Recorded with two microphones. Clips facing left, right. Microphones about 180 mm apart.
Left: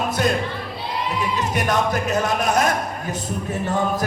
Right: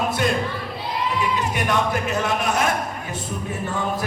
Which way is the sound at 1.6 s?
40° left (ahead or behind).